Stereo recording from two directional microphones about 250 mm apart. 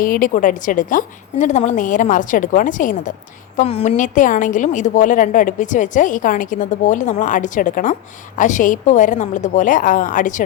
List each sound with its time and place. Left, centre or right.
0.0 s a woman's voice: left